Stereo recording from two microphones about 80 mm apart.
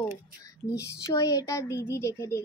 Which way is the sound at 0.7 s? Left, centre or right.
Left.